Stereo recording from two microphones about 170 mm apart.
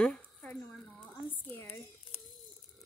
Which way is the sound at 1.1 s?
10° left (ahead or behind).